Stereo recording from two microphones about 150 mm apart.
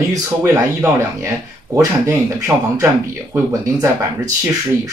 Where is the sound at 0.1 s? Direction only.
20° right (ahead or behind).